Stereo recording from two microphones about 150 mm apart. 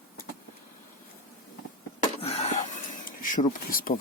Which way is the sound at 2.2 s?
45° left (ahead or behind).